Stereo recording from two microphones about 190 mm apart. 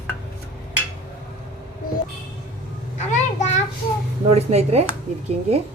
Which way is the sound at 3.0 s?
35° left (ahead or behind).